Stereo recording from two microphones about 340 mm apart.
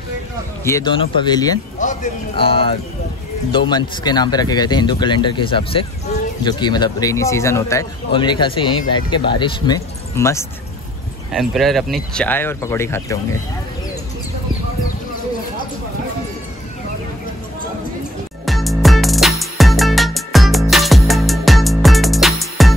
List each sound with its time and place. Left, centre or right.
0.7 s a man's voice: centre
18.4 s music: centre